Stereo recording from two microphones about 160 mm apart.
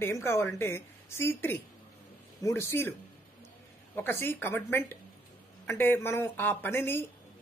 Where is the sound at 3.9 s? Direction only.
15° left (ahead or behind).